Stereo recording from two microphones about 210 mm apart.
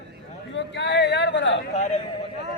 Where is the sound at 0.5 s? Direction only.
55° left (ahead or behind).